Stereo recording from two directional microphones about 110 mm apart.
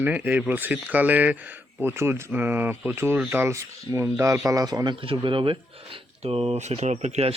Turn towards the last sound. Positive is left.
turn(degrees=-80)